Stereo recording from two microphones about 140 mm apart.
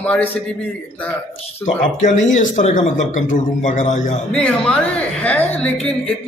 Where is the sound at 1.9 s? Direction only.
60° left (ahead or behind).